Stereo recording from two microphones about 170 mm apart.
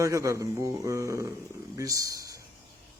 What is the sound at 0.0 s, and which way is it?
A man's voice, 20° right (ahead or behind).